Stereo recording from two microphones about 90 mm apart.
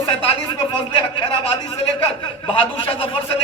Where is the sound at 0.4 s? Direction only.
65° left (ahead or behind).